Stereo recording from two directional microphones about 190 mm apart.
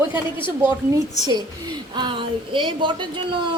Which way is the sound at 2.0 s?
25° right (ahead or behind).